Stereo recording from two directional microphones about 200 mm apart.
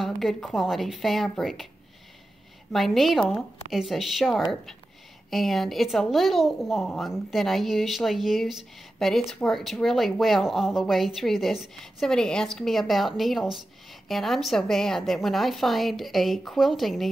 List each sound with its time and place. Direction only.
0.0 s a woman's voice: centre (ahead or behind)
2.7 s a woman's voice: centre (ahead or behind)